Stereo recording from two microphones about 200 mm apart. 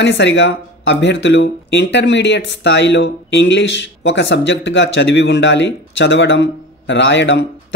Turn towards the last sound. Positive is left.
turn(degrees=65)  # may be behind; listen again after turning